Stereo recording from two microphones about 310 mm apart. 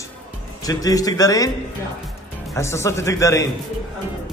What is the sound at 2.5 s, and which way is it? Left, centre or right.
Speech, centre.